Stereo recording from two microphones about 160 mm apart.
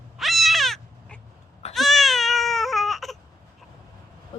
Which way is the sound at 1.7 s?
Centre (ahead or behind).